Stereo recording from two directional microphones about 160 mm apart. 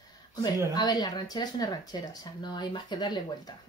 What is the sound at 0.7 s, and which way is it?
Speech, 25° left (ahead or behind).